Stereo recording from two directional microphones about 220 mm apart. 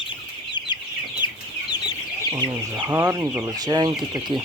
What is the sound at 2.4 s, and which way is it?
Speech, 15° right (ahead or behind).